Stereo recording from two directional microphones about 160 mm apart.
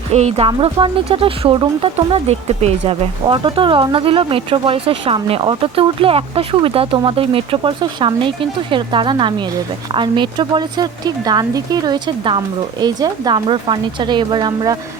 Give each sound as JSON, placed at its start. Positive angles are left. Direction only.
{"t": 0.1, "sound": "speech", "side_deg": -40}